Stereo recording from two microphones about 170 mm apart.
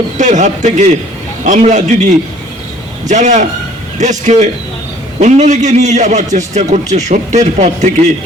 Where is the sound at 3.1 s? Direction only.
45° right (ahead or behind).